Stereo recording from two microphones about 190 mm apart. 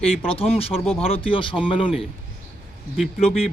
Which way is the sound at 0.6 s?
30° left (ahead or behind).